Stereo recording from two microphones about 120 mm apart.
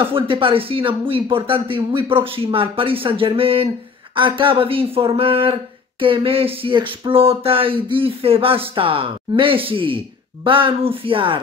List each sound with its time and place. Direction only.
0.0 s speech: 50° right (ahead or behind)